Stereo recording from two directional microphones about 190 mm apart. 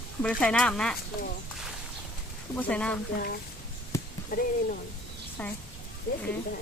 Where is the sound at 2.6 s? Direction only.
5° left (ahead or behind).